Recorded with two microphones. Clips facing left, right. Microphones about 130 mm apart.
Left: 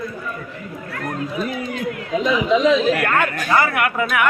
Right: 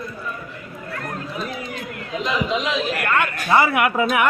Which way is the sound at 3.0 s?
45° left (ahead or behind).